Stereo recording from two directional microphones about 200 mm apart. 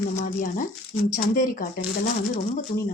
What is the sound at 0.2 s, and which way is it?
Speech, 40° left (ahead or behind).